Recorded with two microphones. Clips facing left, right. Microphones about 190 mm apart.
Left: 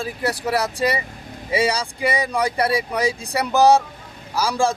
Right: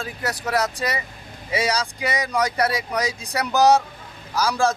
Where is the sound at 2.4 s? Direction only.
30° left (ahead or behind).